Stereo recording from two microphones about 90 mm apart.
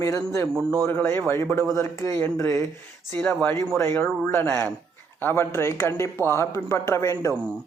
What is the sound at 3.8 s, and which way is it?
A woman's voice, 30° left (ahead or behind).